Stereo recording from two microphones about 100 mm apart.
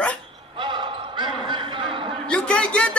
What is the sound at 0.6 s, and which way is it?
Basketball bounce, 55° right (ahead or behind).